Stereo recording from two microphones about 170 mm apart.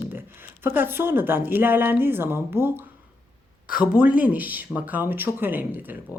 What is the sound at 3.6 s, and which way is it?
Speech, 55° left (ahead or behind).